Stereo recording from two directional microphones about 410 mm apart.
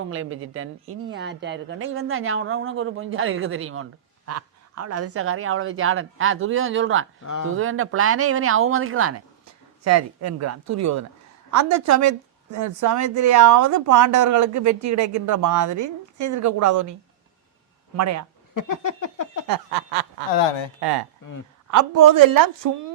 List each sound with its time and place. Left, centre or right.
0.0 s a woman's voice: right
7.3 s speech: left
7.5 s a woman's voice: right
17.9 s speech: right
18.5 s a sound: left
20.8 s speech: right
21.7 s a woman's voice: right